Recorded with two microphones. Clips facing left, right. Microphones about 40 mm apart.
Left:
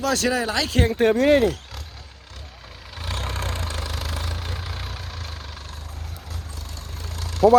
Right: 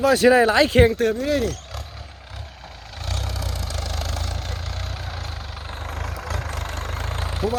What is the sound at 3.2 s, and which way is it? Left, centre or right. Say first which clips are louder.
Vehicle: left 2 dB; left.